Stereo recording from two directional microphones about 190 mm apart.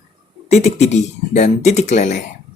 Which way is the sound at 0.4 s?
35° left (ahead or behind).